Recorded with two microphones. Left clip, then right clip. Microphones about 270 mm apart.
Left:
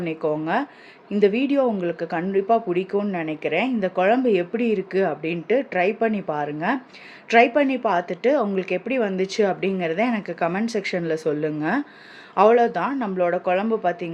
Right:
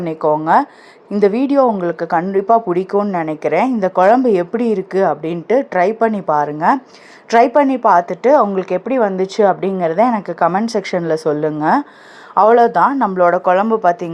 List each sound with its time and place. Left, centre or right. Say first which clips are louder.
0.1 s speech: right 11 dB; centre
1.4 s a woman's voice: right 8 dB; centre
2.0 s speech: right 8 dB; centre